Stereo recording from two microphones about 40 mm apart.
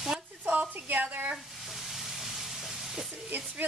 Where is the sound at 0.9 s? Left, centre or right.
Right.